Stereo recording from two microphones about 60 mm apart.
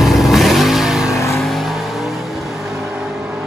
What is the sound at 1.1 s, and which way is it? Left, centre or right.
Vehicle, left.